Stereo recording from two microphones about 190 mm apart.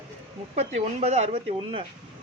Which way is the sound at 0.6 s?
35° right (ahead or behind).